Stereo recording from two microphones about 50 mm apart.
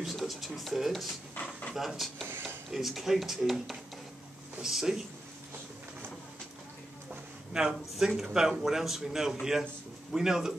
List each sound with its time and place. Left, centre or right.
0.0 s speech: centre
2.2 s a sound: right
2.7 s speech: centre
7.5 s speech: centre